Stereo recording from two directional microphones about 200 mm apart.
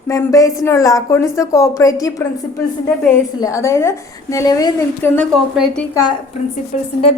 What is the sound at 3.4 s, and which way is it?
Speech, 15° left (ahead or behind).